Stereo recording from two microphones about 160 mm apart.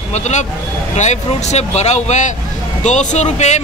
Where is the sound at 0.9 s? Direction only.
45° left (ahead or behind).